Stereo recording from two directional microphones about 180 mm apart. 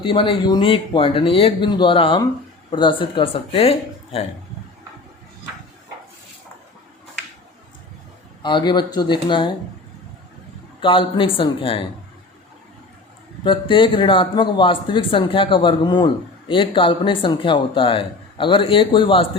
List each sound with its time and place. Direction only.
0.0 s speech: 30° left (ahead or behind)
8.4 s speech: 25° left (ahead or behind)
10.8 s speech: 30° left (ahead or behind)
13.4 s speech: 25° left (ahead or behind)